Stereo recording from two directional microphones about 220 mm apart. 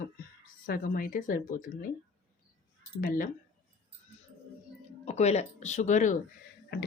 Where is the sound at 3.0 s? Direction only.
40° left (ahead or behind).